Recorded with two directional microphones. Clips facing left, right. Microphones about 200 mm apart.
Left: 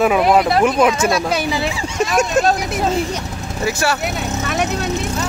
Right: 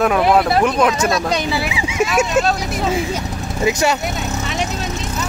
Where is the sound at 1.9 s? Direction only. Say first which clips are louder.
Right 1 dB; 5° right (ahead or behind).